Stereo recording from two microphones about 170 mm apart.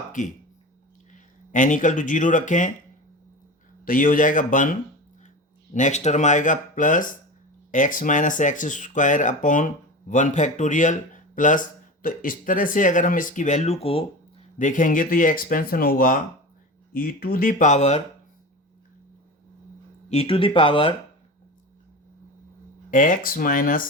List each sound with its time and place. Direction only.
0.2 s speech: 45° left (ahead or behind)
3.8 s speech: 55° left (ahead or behind); by 14.4 s 35° left (ahead or behind)
14.6 s speech: 50° left (ahead or behind)
20.1 s speech: 35° left (ahead or behind)
22.9 s speech: 50° left (ahead or behind)